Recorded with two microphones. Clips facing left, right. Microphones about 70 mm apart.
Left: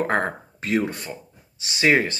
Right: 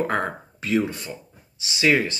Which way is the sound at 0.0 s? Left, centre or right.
Left.